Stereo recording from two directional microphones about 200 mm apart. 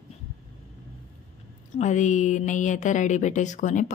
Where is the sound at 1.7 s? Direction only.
35° left (ahead or behind).